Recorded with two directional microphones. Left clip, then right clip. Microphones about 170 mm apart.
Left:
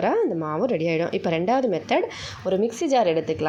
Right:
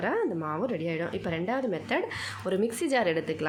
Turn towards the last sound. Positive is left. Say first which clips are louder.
# left 6 dB
turn(degrees=10)  # may be behind; listen again after turning